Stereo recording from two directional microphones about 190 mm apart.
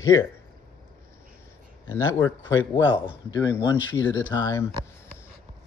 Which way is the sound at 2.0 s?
15° left (ahead or behind).